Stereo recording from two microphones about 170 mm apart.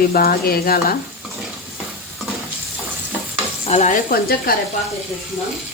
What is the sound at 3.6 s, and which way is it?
Speech, 40° left (ahead or behind).